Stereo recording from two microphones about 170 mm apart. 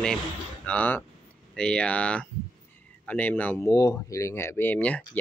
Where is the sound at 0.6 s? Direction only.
10° left (ahead or behind).